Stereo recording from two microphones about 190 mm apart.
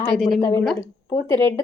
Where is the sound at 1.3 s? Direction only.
25° right (ahead or behind).